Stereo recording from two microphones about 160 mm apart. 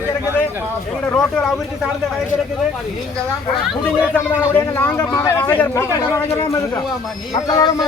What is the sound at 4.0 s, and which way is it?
A man's voice, 15° left (ahead or behind).